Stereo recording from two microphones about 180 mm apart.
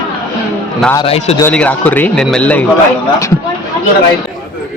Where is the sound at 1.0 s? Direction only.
35° left (ahead or behind).